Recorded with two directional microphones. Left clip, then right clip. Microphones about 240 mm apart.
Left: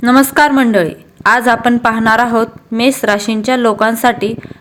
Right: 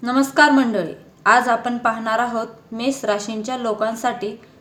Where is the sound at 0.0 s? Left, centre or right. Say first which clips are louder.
Left 6 dB; left.